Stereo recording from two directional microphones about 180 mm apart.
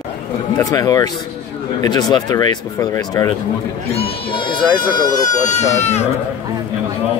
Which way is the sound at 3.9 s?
35° left (ahead or behind).